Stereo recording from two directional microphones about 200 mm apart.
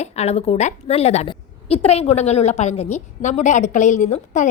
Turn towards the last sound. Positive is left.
turn(degrees=40)  # may be behind; listen again after turning